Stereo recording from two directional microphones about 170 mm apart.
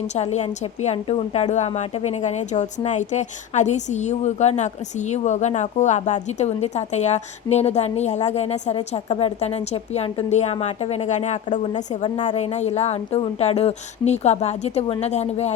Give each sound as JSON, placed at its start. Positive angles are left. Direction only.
{"t": 0.2, "sound": "a woman's voice", "side_deg": 40}
{"t": 11.7, "sound": "a woman's voice", "side_deg": 25}
{"t": 12.4, "sound": "a woman's voice", "side_deg": 40}